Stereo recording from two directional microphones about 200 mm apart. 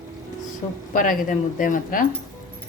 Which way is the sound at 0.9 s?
40° left (ahead or behind).